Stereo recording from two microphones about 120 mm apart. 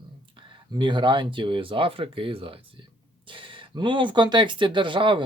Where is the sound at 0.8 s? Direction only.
40° right (ahead or behind).